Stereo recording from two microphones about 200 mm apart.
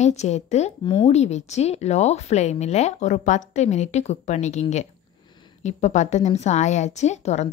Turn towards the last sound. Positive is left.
turn(degrees=35)  # may be behind; listen again after turning